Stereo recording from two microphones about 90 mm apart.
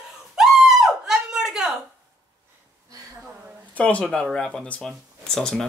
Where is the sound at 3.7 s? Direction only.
15° left (ahead or behind).